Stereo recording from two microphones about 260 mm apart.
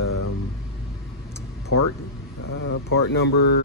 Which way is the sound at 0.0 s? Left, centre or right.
Left.